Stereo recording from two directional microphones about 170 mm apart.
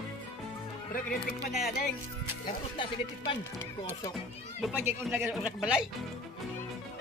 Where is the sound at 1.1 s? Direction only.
Centre (ahead or behind).